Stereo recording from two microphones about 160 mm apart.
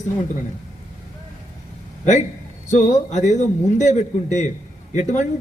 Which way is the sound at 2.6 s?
50° left (ahead or behind).